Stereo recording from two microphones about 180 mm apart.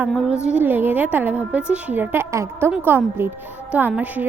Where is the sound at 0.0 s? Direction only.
5° right (ahead or behind).